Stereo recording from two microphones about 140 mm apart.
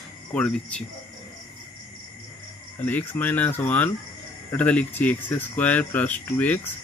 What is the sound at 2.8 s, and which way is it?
Speech, 15° left (ahead or behind).